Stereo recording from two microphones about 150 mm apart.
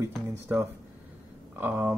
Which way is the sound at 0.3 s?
15° right (ahead or behind).